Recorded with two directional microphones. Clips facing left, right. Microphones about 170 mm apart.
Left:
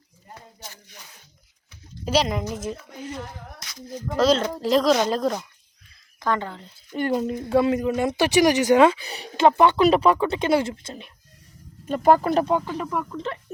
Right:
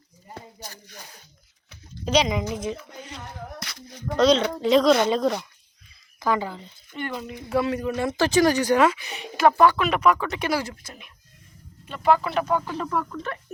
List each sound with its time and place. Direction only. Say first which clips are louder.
0.6 s speech: right 2 dB; 40° right (ahead or behind)
2.0 s speech: even; 5° left (ahead or behind)
3.6 s a sound: right 2 dB; 60° right (ahead or behind)
3.8 s speech: right 1 dB; 5° left (ahead or behind)
6.9 s speech: left 8 dB; 40° left (ahead or behind)
7.5 s speech: left 3 dB; 25° left (ahead or behind)
9.5 s speech: left 2 dB; 20° left (ahead or behind)
11.9 s speech: left 4 dB; 45° left (ahead or behind)
12.6 s speech: even; 10° left (ahead or behind)